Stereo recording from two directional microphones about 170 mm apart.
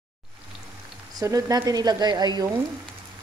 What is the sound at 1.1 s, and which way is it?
Speech, 20° right (ahead or behind).